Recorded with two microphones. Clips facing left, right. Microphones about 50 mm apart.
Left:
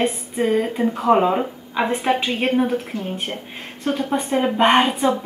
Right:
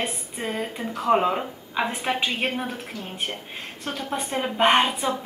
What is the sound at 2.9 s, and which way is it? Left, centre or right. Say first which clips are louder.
Speech: left 8 dB; left.